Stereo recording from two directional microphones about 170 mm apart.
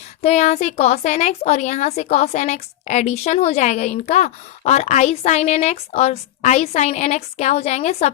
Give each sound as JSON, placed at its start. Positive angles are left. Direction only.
{"t": 0.2, "sound": "speech", "side_deg": 40}